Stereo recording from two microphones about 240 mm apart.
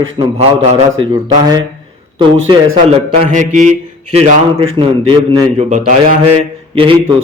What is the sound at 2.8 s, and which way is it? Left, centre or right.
A man's voice, right.